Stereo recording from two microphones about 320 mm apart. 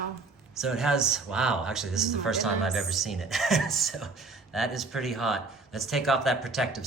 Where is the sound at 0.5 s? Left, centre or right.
Centre.